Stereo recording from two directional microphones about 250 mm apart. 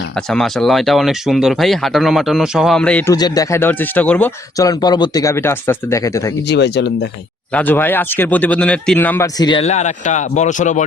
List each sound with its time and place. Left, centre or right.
0.3 s speech: centre
3.2 s speech: centre
6.5 s speech: left
7.5 s speech: centre; by 10.8 s left